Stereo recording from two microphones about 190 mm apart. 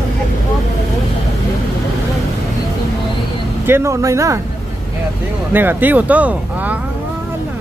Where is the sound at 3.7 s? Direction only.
15° right (ahead or behind).